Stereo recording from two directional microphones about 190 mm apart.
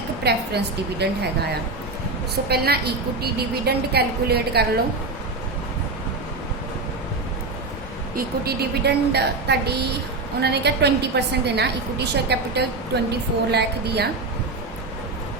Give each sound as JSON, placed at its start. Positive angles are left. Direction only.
{"t": 0.3, "sound": "a woman's voice", "side_deg": -60}
{"t": 2.5, "sound": "a woman's voice", "side_deg": -55}
{"t": 8.1, "sound": "a woman's voice", "side_deg": -55}